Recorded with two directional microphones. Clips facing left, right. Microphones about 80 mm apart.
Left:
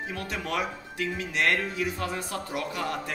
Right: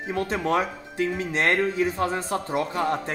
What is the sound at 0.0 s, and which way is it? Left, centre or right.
Speech, right.